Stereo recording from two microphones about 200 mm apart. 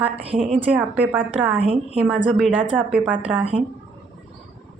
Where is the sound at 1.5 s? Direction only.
30° right (ahead or behind).